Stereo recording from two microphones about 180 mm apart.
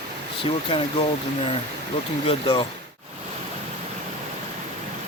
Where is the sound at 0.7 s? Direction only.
30° left (ahead or behind).